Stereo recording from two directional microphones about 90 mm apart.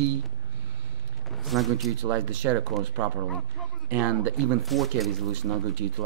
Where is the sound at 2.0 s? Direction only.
20° right (ahead or behind).